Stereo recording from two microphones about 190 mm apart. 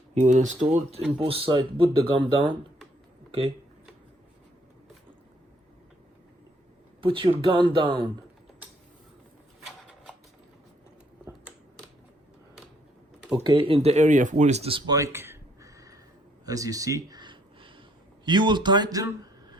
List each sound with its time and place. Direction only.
0.1 s speech: 40° right (ahead or behind)
7.0 s speech: 25° right (ahead or behind)
9.6 s a sound: centre (ahead or behind)
13.3 s speech: 25° right (ahead or behind)
16.5 s a sound: 20° right (ahead or behind)
18.3 s speech: 25° right (ahead or behind)